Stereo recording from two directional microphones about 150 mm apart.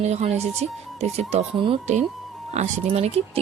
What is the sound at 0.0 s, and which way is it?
Speech, 45° right (ahead or behind).